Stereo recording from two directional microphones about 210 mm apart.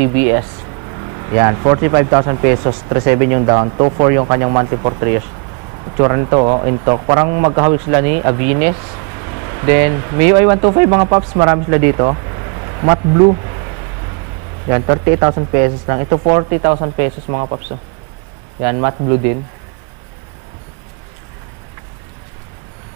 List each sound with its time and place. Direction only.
1.3 s speech: 20° right (ahead or behind)
9.7 s speech: 15° right (ahead or behind)
14.7 s speech: 20° right (ahead or behind)
18.6 s speech: 20° right (ahead or behind)